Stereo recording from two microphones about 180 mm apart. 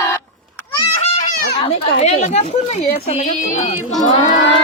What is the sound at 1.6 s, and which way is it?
Speech, 35° left (ahead or behind).